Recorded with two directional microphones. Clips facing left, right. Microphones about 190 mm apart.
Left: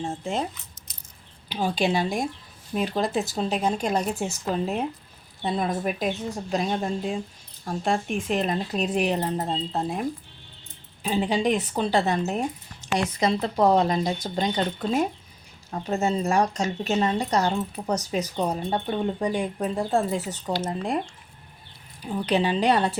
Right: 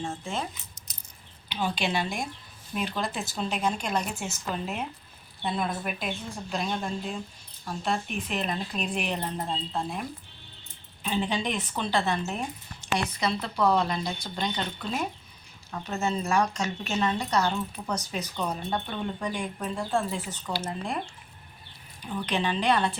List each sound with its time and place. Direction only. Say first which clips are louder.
1.5 s speech: left 5 dB; 40° left (ahead or behind)
22.0 s speech: left 5 dB; 35° left (ahead or behind)